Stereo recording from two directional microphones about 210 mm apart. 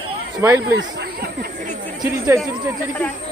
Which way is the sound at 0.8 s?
55° right (ahead or behind).